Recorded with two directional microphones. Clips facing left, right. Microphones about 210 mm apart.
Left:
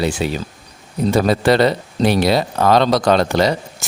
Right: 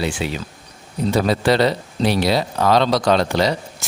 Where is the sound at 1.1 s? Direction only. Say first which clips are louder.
Left 3 dB; 50° left (ahead or behind).